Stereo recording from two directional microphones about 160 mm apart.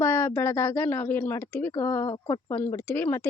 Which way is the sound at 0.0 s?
15° left (ahead or behind).